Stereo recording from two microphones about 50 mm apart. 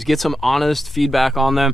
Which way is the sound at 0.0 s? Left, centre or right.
Centre.